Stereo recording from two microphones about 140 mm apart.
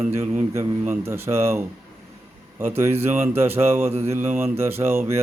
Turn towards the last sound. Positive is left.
turn(degrees=-15)  # may be behind; listen again after turning